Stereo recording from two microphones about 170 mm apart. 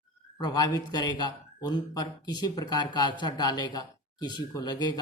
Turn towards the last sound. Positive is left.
turn(degrees=25)  # may be behind; listen again after turning